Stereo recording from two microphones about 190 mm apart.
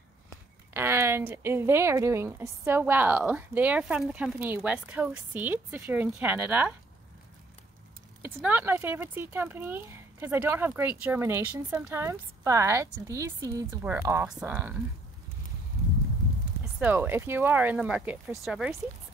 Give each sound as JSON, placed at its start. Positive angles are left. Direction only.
{"t": 0.3, "sound": "speech", "side_deg": -15}
{"t": 8.2, "sound": "speech", "side_deg": -10}
{"t": 16.8, "sound": "speech", "side_deg": -10}